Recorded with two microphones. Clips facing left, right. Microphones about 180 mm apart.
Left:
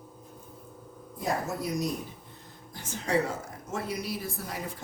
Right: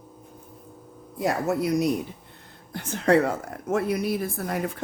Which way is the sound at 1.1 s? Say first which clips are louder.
Right 7 dB; 70° right (ahead or behind).